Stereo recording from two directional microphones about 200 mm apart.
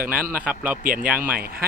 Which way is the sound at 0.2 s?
45° right (ahead or behind).